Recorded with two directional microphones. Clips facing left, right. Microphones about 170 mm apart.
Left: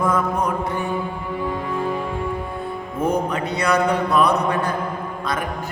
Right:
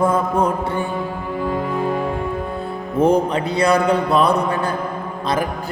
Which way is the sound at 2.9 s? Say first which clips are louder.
Right 6 dB; 30° right (ahead or behind).